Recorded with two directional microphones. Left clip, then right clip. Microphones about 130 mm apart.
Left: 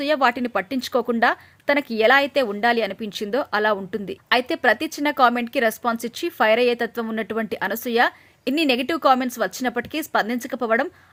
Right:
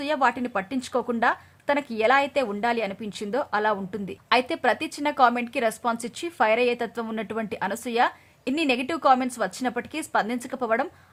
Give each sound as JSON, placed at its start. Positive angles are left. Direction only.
{"t": 0.0, "sound": "a woman's voice", "side_deg": 20}